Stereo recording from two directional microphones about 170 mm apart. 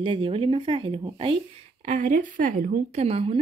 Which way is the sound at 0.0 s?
30° right (ahead or behind).